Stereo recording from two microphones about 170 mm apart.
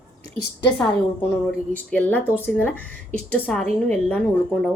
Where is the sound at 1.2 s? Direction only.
10° left (ahead or behind).